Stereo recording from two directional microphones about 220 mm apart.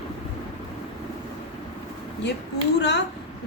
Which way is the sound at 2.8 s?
50° left (ahead or behind).